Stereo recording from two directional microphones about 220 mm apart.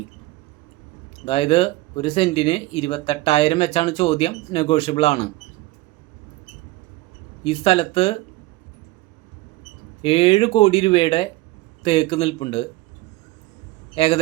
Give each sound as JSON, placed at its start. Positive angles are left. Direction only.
{"t": 1.2, "sound": "speech", "side_deg": 25}
{"t": 7.4, "sound": "speech", "side_deg": 25}
{"t": 10.0, "sound": "speech", "side_deg": 25}
{"t": 13.9, "sound": "a man's voice", "side_deg": 25}